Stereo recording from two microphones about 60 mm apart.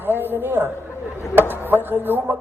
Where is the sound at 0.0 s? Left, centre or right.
Right.